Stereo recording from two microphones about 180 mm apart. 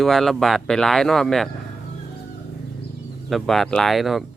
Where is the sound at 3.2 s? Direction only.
Centre (ahead or behind).